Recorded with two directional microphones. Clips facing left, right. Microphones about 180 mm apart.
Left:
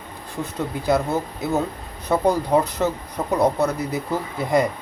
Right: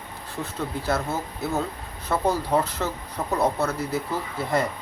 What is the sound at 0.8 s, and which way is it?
Speech, 15° left (ahead or behind).